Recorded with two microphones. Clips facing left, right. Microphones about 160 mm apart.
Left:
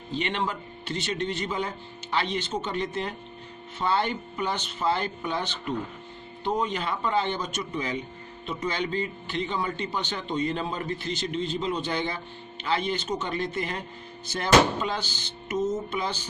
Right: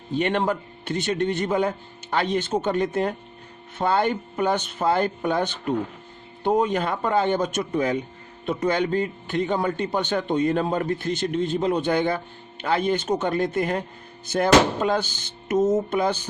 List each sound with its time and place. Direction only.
0.1 s a man's voice: 50° right (ahead or behind)